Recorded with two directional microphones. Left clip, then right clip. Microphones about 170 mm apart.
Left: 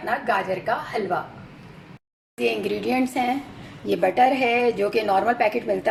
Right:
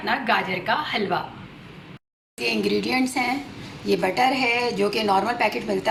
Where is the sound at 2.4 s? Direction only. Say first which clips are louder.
Even; 55° left (ahead or behind).